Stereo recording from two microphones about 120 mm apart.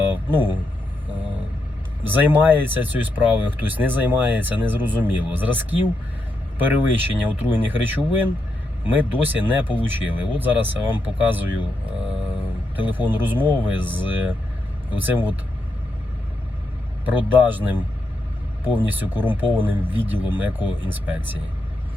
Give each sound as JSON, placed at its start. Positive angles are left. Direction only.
{"t": 0.1, "sound": "speech", "side_deg": -15}
{"t": 2.0, "sound": "a man's voice", "side_deg": -15}
{"t": 12.9, "sound": "speech", "side_deg": -15}
{"t": 17.1, "sound": "speech", "side_deg": -15}